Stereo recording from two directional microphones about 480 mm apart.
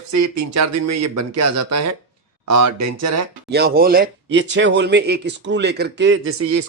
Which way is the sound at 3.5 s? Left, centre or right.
Centre.